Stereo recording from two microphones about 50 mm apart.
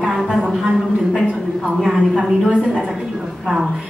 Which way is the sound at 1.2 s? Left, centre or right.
Right.